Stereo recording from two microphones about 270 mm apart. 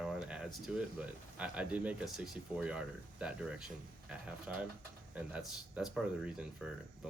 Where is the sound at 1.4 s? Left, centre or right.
Centre.